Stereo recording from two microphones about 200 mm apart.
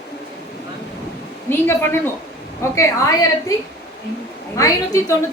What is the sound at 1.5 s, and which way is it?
A woman's voice, 10° left (ahead or behind).